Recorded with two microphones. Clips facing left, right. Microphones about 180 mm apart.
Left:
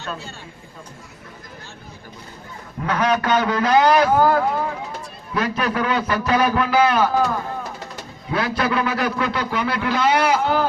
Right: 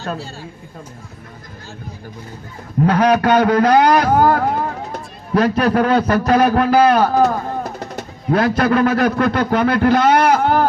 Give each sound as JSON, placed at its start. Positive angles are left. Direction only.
{"t": 0.0, "sound": "a woman's voice", "side_deg": -35}
{"t": 2.8, "sound": "a man's voice", "side_deg": -40}